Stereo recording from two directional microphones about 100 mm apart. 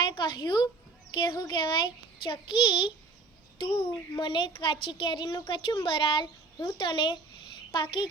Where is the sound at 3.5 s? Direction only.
60° left (ahead or behind).